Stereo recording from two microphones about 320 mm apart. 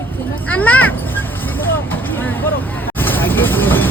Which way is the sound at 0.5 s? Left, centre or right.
Centre.